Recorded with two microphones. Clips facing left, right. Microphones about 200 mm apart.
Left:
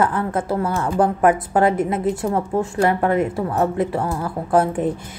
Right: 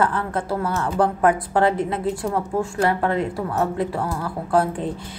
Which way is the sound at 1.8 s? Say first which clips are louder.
Left 3 dB; 20° left (ahead or behind).